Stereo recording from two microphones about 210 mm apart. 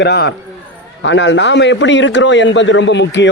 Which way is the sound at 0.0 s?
55° left (ahead or behind).